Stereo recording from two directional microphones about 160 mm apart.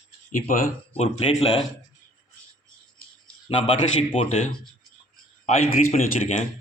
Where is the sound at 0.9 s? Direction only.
40° left (ahead or behind).